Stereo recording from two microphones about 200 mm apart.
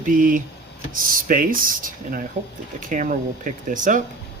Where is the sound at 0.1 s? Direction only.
45° right (ahead or behind).